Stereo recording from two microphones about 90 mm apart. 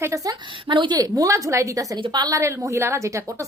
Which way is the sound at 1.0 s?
40° right (ahead or behind).